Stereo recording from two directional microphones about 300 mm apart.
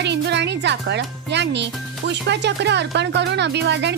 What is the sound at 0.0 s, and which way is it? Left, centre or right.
Speech, right.